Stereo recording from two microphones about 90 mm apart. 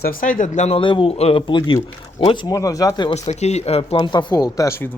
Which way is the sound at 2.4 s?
40° left (ahead or behind).